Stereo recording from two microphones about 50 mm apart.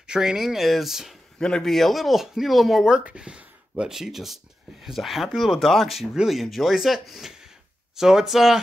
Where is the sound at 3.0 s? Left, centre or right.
Centre.